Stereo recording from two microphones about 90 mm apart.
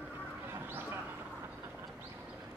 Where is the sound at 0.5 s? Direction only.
25° right (ahead or behind).